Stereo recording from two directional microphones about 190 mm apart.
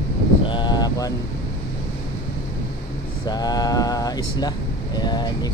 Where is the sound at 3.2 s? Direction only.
20° left (ahead or behind).